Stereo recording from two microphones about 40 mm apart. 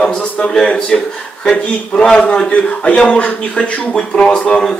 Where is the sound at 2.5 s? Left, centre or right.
Left.